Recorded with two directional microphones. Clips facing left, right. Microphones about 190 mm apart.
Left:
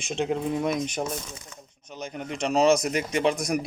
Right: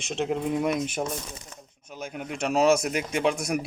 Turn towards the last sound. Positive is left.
turn(degrees=-5)  # may be behind; listen again after turning